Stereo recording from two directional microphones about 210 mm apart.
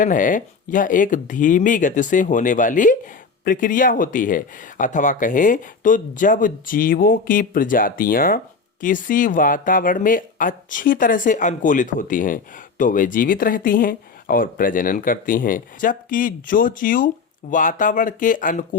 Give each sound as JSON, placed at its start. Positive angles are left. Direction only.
{"t": 0.0, "sound": "speech", "side_deg": 40}